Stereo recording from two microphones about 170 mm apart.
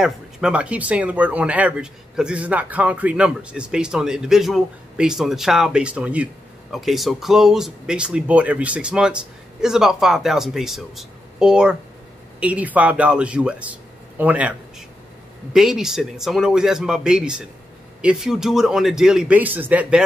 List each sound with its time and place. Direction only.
0.0 s speech: 5° right (ahead or behind)
15.5 s speech: 5° right (ahead or behind)